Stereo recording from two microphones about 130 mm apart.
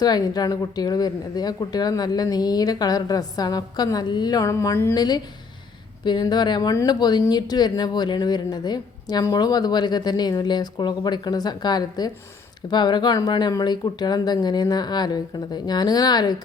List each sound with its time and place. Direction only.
0.0 s speech: 30° left (ahead or behind)
4.9 s speech: 30° left (ahead or behind)